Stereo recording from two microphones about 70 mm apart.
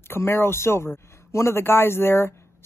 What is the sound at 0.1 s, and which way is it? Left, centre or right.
Speech, left.